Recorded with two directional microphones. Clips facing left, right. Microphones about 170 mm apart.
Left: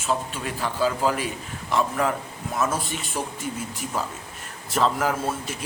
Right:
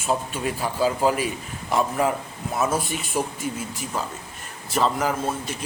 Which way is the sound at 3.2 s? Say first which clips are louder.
Right 5 dB; 10° right (ahead or behind).